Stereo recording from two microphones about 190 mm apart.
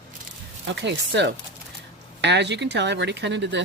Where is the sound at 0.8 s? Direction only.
65° right (ahead or behind).